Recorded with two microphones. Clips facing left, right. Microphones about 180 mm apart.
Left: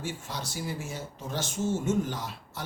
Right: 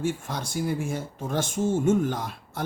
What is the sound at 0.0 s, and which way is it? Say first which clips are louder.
Speech: right 7 dB; 50° right (ahead or behind).